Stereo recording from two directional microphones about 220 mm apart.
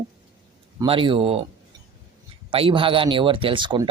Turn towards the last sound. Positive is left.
turn(degrees=-20)  # may be behind; listen again after turning